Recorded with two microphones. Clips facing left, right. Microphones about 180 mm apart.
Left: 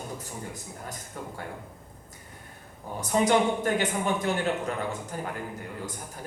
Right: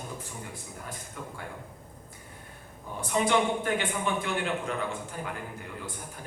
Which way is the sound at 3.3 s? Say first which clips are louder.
Left 2 dB; 40° left (ahead or behind).